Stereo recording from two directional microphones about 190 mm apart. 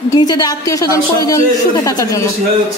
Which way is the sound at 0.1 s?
20° left (ahead or behind).